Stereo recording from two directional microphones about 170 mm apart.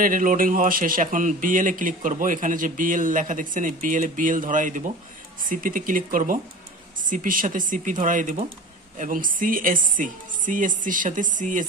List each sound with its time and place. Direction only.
0.0 s a man's voice: 50° right (ahead or behind)